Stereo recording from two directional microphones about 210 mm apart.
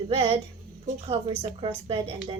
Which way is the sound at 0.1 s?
25° right (ahead or behind).